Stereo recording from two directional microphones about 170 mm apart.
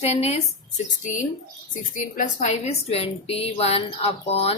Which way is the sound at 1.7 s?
50° left (ahead or behind).